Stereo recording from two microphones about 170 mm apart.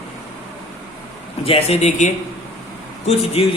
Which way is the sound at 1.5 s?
35° left (ahead or behind).